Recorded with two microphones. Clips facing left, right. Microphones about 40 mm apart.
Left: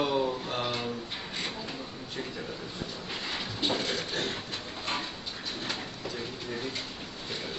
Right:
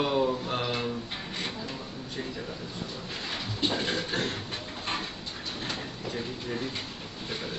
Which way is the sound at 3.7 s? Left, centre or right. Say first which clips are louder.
Right 2 dB; right.